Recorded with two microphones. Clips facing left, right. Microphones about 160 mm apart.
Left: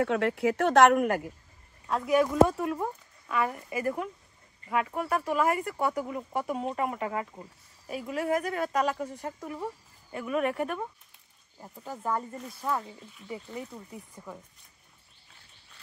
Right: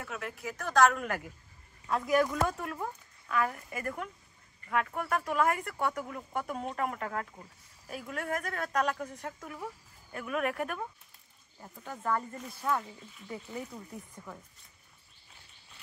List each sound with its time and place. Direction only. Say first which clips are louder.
0.0 s speech: left 14 dB; 90° left; by 1.0 s 65° left (ahead or behind)
1.0 s speech: left 8 dB; 45° left (ahead or behind)
1.9 s speech: left 3 dB; centre (ahead or behind)
11.6 s speech: left 2 dB; 10° left (ahead or behind)
14.1 s speech: left 3 dB; 10° left (ahead or behind)